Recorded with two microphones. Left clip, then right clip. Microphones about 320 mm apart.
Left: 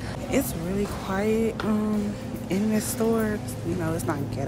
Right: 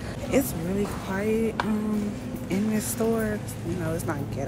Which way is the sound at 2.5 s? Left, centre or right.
Centre.